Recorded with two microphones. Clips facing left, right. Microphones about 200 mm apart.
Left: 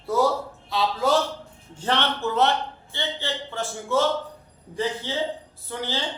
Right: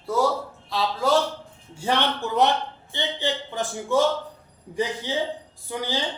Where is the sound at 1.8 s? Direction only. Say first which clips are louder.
Right 1 dB; 10° right (ahead or behind).